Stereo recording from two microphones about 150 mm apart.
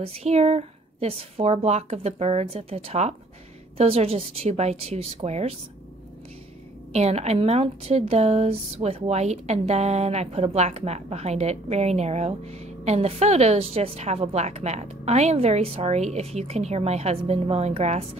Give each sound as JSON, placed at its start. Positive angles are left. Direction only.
{"t": 0.0, "sound": "speech", "side_deg": -45}
{"t": 6.9, "sound": "speech", "side_deg": -45}